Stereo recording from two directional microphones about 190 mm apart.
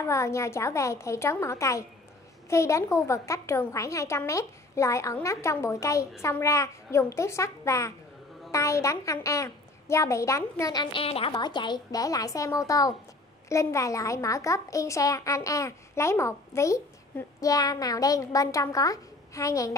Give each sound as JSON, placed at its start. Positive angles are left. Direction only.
{"t": 0.0, "sound": "a child's voice", "side_deg": 15}